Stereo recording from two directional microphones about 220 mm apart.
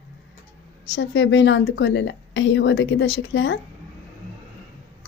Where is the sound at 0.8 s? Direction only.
55° left (ahead or behind).